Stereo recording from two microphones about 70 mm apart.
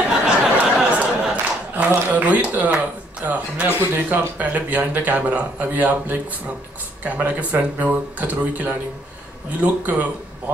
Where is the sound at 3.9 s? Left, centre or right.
Right.